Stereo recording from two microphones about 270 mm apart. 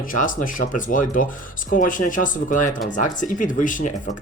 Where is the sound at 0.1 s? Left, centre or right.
Left.